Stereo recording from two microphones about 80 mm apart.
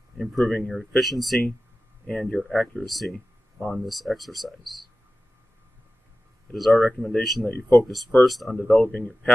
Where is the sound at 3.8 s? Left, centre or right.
Centre.